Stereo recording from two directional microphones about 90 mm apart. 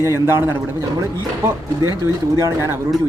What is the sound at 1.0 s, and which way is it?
Speech, 35° right (ahead or behind).